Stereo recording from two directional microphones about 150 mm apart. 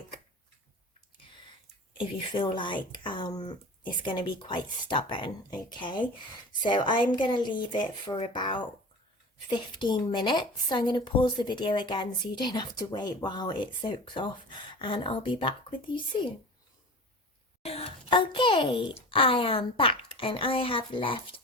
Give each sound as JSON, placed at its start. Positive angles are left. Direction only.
{"t": 2.0, "sound": "a woman's voice", "side_deg": 35}
{"t": 17.6, "sound": "speech", "side_deg": 40}